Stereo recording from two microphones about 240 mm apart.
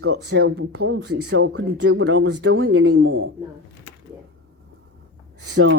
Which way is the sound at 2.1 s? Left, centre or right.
Right.